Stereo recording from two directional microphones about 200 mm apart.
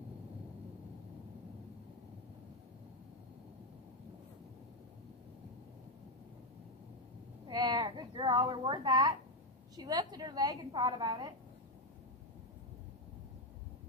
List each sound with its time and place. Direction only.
7.4 s a woman's voice: 20° right (ahead or behind)